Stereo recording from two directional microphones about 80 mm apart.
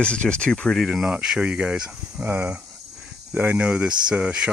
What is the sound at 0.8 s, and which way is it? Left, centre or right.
Speech, centre.